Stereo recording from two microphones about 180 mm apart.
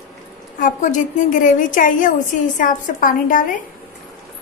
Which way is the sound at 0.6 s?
45° left (ahead or behind).